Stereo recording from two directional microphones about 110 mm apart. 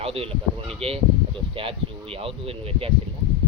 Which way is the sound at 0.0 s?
60° right (ahead or behind).